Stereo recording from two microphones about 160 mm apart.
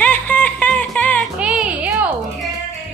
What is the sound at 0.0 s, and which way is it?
Music, 10° left (ahead or behind).